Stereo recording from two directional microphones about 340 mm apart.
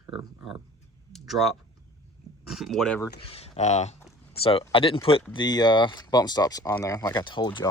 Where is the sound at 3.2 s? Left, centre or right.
Centre.